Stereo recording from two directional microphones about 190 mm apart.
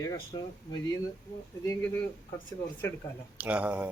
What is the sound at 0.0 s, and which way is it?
Speech, 20° left (ahead or behind).